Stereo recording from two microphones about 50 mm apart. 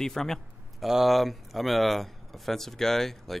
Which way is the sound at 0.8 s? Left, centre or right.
Centre.